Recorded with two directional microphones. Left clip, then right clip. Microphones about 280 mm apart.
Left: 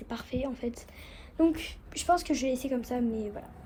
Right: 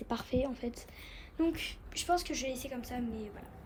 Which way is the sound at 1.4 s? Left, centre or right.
Centre.